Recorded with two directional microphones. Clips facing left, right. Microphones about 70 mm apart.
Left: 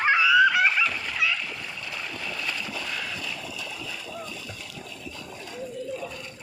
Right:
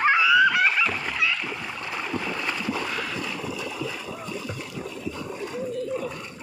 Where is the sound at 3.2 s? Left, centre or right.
Right.